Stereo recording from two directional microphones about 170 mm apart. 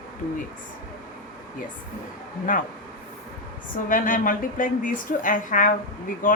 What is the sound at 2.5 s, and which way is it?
Speech, 50° left (ahead or behind).